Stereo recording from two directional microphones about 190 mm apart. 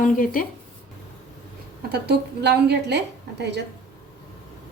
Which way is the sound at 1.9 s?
60° right (ahead or behind).